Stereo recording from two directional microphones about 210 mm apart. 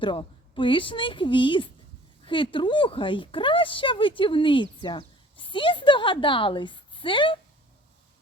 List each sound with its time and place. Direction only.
0.0 s a woman's voice: 20° left (ahead or behind)